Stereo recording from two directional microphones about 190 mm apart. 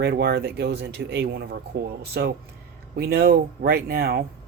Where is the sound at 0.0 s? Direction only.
60° right (ahead or behind).